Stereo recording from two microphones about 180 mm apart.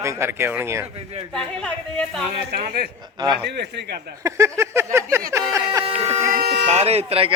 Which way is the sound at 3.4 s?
65° right (ahead or behind).